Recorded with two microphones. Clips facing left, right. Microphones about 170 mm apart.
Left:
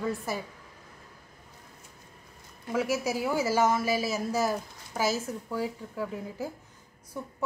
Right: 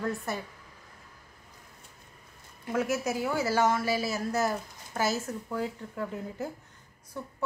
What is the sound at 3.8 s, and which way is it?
Speech, 15° left (ahead or behind).